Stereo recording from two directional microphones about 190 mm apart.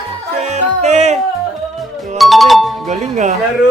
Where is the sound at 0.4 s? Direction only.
35° right (ahead or behind).